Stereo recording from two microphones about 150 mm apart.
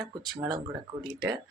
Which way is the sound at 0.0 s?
30° right (ahead or behind).